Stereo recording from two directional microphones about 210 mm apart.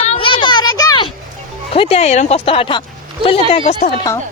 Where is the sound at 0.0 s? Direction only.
25° left (ahead or behind).